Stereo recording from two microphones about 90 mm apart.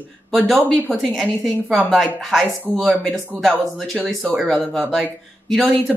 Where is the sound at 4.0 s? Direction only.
10° left (ahead or behind).